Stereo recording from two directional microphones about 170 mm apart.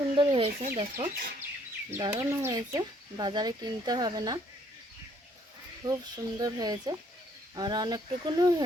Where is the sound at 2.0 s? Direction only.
25° right (ahead or behind).